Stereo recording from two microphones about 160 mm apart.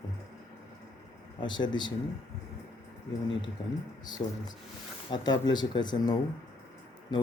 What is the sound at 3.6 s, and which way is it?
Speech, 30° left (ahead or behind).